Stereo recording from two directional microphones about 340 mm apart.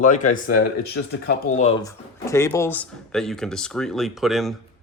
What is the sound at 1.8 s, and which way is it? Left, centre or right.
Speech, centre.